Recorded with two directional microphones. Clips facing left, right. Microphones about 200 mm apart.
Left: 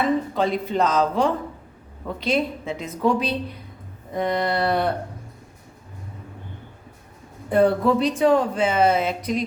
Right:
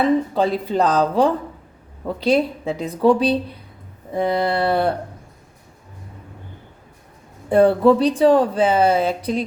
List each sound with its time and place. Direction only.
0.3 s speech: 35° right (ahead or behind)
7.5 s speech: 30° right (ahead or behind)